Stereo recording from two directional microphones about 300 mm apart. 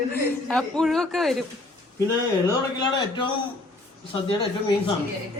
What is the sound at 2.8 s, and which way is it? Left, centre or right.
Speech, centre.